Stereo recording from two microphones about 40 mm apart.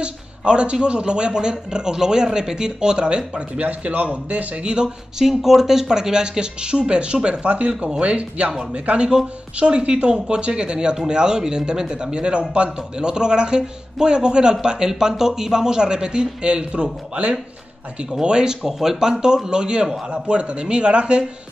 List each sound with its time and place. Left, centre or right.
0.0 s speech: right
4.8 s a man's voice: centre; by 21.2 s right